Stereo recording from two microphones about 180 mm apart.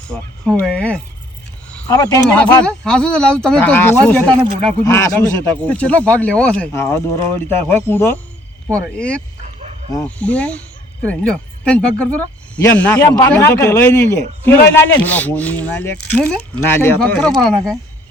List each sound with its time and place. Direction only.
0.1 s speech: 5° left (ahead or behind)
1.9 s speech: 20° left (ahead or behind)
2.3 s speech: 5° left (ahead or behind)
9.6 s bow-wow: 40° right (ahead or behind)
10.2 s speech: 5° left (ahead or behind)